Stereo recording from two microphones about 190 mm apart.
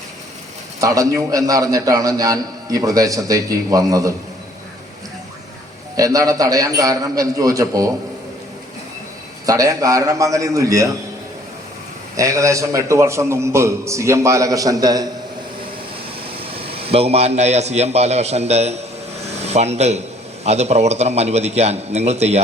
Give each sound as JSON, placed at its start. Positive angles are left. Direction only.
{"t": 0.8, "sound": "a man's voice", "side_deg": -15}
{"t": 6.0, "sound": "a man's voice", "side_deg": -20}
{"t": 9.5, "sound": "a man's voice", "side_deg": -20}
{"t": 12.1, "sound": "a man's voice", "side_deg": -15}
{"t": 16.4, "sound": "a man's voice", "side_deg": -30}